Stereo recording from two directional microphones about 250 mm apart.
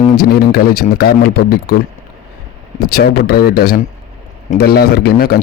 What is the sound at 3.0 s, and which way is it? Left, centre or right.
Speech, left.